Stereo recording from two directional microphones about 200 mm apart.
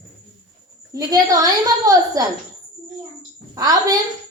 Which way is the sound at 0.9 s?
20° right (ahead or behind).